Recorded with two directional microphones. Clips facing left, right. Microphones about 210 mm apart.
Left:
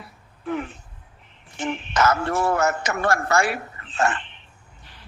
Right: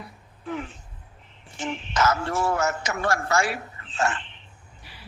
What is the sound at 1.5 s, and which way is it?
A man's voice, 55° left (ahead or behind).